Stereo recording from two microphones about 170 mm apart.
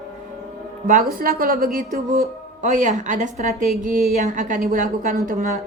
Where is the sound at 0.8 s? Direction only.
55° right (ahead or behind).